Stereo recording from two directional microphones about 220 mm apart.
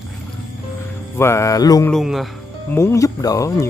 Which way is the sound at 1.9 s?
Centre (ahead or behind).